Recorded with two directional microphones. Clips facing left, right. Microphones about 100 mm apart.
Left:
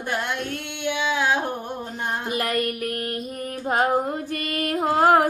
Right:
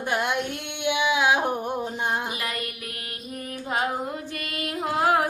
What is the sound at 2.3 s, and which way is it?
Child singing, 50° left (ahead or behind).